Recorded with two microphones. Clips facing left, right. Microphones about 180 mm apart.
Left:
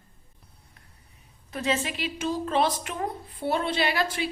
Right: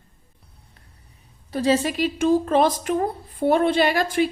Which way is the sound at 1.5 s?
35° right (ahead or behind).